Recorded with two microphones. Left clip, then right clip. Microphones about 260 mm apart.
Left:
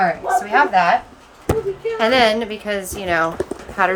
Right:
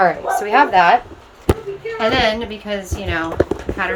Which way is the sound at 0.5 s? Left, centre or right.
Right.